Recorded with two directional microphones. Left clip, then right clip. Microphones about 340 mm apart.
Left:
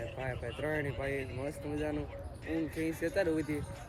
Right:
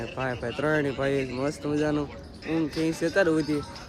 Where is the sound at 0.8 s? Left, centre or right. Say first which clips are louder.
Right 10 dB; centre.